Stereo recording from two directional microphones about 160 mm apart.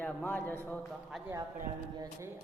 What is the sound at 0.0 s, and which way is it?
Speech, 5° left (ahead or behind).